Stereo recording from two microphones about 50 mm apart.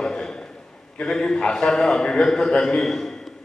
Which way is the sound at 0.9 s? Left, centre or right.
Centre.